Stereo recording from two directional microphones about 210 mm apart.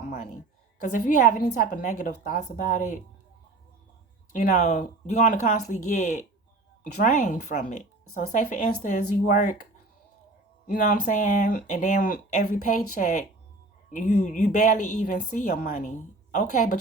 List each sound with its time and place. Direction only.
0.8 s a woman's voice: 40° left (ahead or behind)
4.3 s a woman's voice: 40° left (ahead or behind)
10.7 s a woman's voice: 40° left (ahead or behind)